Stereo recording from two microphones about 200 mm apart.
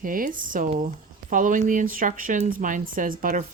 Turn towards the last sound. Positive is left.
turn(degrees=-40)  # may be behind; listen again after turning